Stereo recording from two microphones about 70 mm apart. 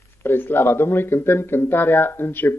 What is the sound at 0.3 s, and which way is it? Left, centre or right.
Speech, left.